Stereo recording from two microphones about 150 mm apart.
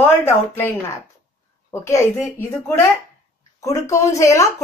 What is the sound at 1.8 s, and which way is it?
Speech, 20° left (ahead or behind).